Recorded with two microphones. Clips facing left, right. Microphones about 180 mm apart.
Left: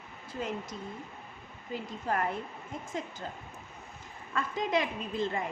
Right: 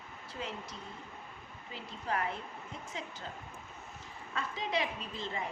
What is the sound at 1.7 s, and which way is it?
Speech, 50° left (ahead or behind).